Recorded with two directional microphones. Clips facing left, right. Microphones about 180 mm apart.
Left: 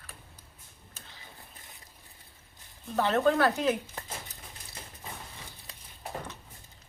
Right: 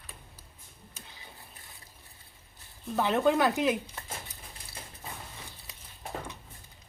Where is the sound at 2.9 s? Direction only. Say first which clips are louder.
Even; 15° right (ahead or behind).